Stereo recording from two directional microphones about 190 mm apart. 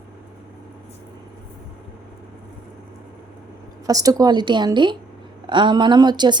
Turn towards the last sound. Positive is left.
turn(degrees=-20)  # may be behind; listen again after turning